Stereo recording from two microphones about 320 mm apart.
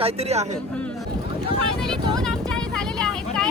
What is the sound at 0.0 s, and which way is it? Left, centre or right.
Speech, centre.